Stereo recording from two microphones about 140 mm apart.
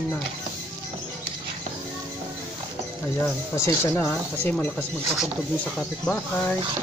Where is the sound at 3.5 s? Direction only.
20° left (ahead or behind); by 5.3 s centre (ahead or behind).